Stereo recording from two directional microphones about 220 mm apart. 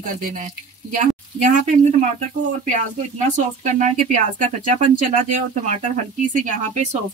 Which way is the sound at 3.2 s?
35° right (ahead or behind).